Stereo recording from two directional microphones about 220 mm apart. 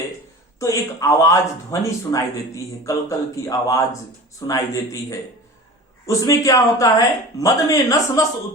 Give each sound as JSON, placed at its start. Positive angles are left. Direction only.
{"t": 0.6, "sound": "speech", "side_deg": 15}